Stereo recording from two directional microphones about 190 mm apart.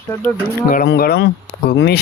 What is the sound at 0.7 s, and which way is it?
Speech, 50° left (ahead or behind).